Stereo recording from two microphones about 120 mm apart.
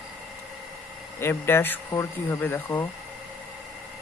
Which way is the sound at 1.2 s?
20° left (ahead or behind).